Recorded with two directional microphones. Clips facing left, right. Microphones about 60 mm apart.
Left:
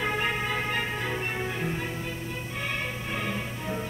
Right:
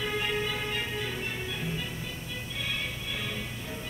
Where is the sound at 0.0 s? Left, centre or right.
Left.